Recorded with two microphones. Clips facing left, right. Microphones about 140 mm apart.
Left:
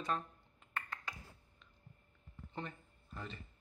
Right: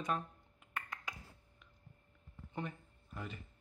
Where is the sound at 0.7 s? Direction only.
10° right (ahead or behind).